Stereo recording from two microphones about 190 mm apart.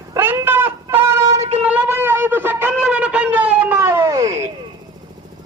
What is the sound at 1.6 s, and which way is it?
Wind instrument, 10° right (ahead or behind).